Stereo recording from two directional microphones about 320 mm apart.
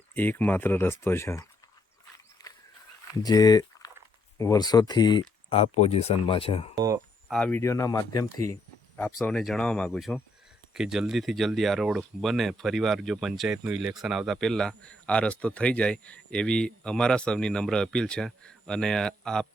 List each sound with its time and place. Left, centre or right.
0.1 s speech: centre
2.4 s a sound: centre
3.2 s speech: centre
6.7 s speech: centre
7.3 s speech: centre